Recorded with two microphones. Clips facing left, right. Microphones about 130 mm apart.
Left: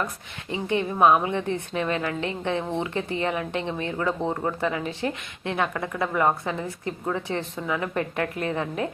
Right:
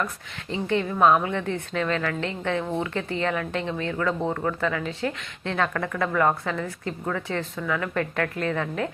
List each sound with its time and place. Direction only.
0.5 s speech: 20° left (ahead or behind)